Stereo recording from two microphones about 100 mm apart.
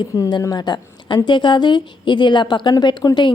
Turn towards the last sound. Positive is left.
turn(degrees=45)  # may be behind; listen again after turning